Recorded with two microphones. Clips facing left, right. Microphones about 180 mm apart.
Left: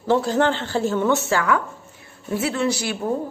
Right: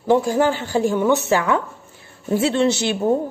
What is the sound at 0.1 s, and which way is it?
A woman's voice, 10° right (ahead or behind).